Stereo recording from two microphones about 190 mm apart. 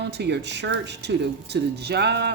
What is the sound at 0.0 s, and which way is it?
A woman's voice, 60° right (ahead or behind).